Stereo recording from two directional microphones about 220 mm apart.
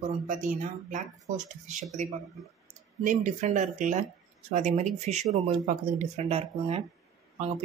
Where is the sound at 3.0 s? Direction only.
35° right (ahead or behind).